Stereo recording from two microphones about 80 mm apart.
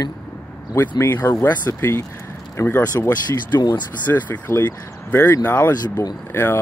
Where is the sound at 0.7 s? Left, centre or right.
Left.